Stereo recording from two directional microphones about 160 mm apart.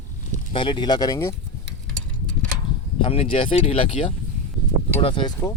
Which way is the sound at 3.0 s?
35° left (ahead or behind).